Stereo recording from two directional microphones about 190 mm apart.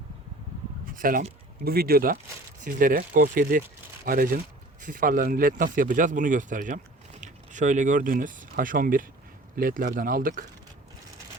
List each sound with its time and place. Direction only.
0.9 s speech: 45° right (ahead or behind)